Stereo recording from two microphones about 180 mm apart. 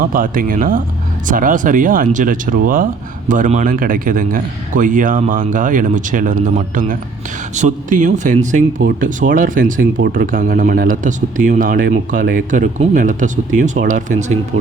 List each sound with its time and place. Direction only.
0.0 s speech: 50° right (ahead or behind)